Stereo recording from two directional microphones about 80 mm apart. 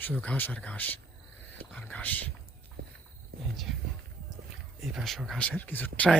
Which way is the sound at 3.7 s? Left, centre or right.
Centre.